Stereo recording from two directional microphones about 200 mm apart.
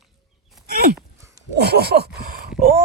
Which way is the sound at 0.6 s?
50° right (ahead or behind).